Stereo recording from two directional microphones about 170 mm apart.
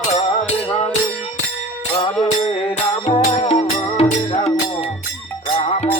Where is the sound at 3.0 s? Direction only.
35° left (ahead or behind).